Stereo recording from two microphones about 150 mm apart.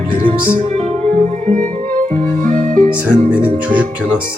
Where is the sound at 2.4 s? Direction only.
55° right (ahead or behind).